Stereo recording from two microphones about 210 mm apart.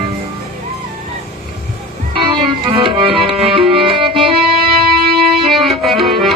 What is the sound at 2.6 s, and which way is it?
Music, 25° right (ahead or behind).